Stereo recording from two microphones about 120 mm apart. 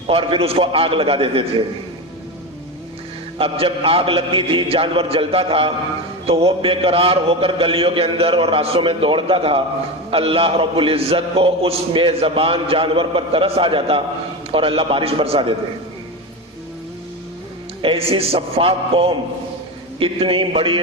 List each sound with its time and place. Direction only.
0.1 s a man's voice: 50° right (ahead or behind)
3.3 s a man's voice: 50° right (ahead or behind)
17.8 s a man's voice: 50° right (ahead or behind)